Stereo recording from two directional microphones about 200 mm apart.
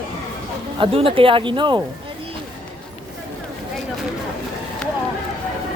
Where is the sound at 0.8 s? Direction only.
25° right (ahead or behind).